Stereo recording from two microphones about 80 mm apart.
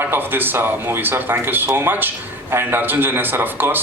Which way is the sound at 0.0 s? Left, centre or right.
Right.